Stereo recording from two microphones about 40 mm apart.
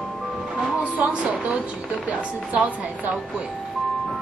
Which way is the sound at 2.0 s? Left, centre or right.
Right.